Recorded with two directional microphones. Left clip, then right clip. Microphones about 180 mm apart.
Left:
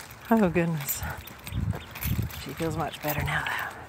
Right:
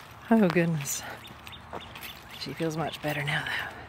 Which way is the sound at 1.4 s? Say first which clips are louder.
Left 1 dB; 50° left (ahead or behind).